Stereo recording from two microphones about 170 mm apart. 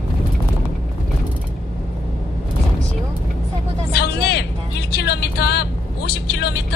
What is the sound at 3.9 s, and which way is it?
Vehicle, 75° left (ahead or behind).